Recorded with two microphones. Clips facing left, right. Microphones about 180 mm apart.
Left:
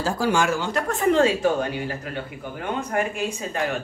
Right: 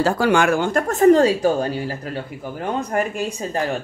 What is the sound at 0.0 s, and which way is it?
Speech, 65° right (ahead or behind).